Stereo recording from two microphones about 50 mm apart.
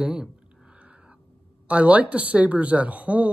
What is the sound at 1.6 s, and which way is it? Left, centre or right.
A woman's voice, right.